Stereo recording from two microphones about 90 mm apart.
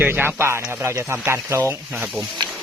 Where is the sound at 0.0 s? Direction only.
20° right (ahead or behind).